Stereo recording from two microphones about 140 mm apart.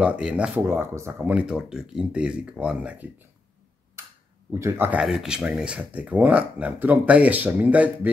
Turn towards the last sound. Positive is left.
turn(degrees=-10)  # may be behind; listen again after turning